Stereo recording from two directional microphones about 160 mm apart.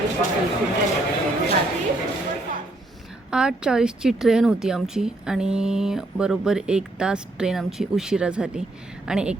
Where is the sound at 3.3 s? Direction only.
5° right (ahead or behind).